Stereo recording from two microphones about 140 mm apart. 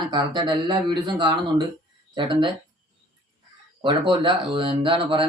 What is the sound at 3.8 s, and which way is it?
A man's voice, 35° right (ahead or behind).